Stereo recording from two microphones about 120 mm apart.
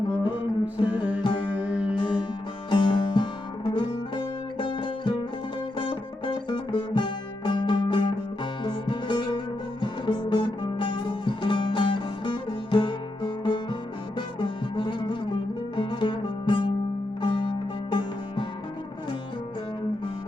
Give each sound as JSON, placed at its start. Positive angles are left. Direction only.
{"t": 0.9, "sound": "music", "side_deg": -10}
{"t": 1.2, "sound": "music", "side_deg": 45}
{"t": 1.5, "sound": "music", "side_deg": -10}
{"t": 2.0, "sound": "music", "side_deg": 40}